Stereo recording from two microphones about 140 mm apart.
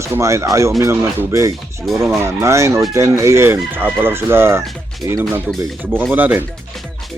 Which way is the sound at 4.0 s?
15° right (ahead or behind).